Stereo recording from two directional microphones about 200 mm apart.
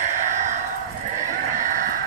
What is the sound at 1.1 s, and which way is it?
Honk, 40° right (ahead or behind).